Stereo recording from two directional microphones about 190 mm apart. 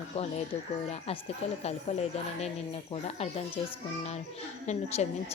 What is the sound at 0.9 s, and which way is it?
A woman's voice, 30° left (ahead or behind).